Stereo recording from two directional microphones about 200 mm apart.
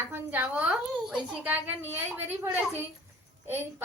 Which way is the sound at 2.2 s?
10° right (ahead or behind).